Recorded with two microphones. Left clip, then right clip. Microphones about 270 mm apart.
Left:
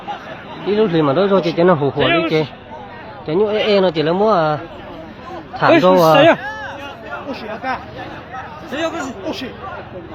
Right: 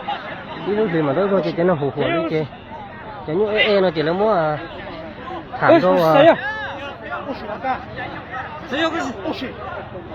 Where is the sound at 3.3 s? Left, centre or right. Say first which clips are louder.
Left 2 dB; centre.